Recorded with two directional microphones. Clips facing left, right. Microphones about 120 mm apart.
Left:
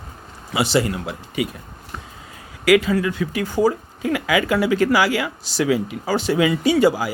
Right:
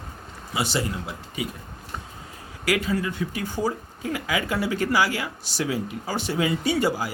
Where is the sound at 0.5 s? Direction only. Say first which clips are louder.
Left 7 dB; 75° left (ahead or behind).